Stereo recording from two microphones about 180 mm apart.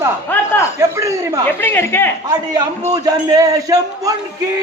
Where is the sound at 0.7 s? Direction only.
15° right (ahead or behind).